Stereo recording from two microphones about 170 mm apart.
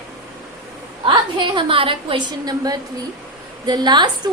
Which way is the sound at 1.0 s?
30° right (ahead or behind).